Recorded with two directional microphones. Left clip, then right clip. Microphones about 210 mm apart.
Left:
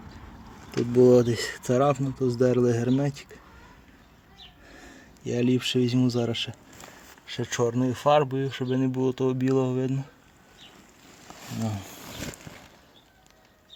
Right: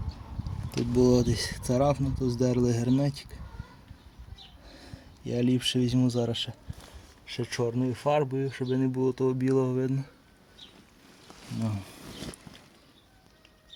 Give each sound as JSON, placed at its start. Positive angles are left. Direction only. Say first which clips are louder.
{"t": 0.7, "sound": "speech", "louder": "left 6 dB", "side_deg": -15}
{"t": 4.7, "sound": "speech", "louder": "left 2 dB", "side_deg": -15}